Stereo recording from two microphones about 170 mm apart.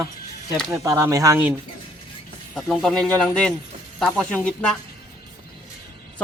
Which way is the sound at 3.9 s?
5° left (ahead or behind).